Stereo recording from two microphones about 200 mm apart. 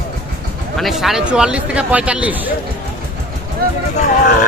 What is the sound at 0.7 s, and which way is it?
Speech, centre (ahead or behind).